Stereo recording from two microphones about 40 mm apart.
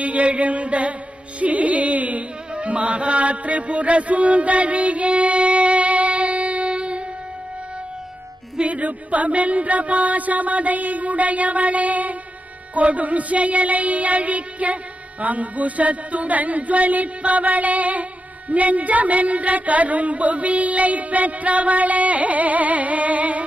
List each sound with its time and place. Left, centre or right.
0.0 s music: right
8.6 s child singing: right